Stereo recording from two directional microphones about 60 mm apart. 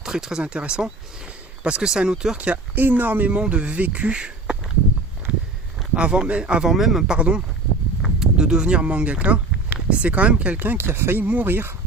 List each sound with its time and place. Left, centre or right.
0.0 s speech: centre
0.4 s speech: centre
2.7 s speech: right; by 4.5 s centre
5.9 s speech: centre
6.7 s speech: centre
7.2 s speech: right
8.0 s a sound: centre
9.9 s speech: right